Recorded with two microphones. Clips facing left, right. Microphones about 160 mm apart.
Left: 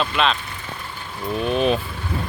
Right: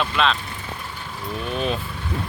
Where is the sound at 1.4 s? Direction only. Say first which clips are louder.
Left 6 dB; 20° left (ahead or behind).